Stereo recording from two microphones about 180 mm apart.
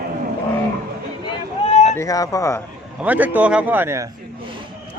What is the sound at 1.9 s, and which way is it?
Speech, 20° left (ahead or behind).